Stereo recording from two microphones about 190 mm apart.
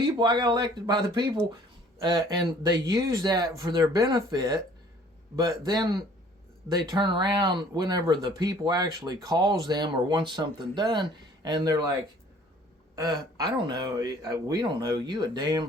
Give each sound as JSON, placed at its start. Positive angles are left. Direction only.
{"t": 0.0, "sound": "speech", "side_deg": -20}
{"t": 13.0, "sound": "speech", "side_deg": -20}